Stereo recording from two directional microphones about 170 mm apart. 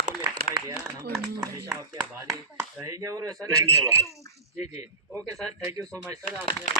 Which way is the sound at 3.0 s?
20° right (ahead or behind).